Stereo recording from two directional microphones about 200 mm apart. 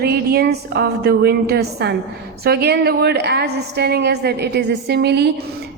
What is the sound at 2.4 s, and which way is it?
A woman's voice, 55° right (ahead or behind).